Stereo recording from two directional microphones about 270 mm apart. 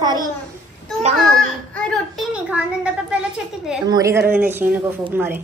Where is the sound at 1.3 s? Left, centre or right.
Centre.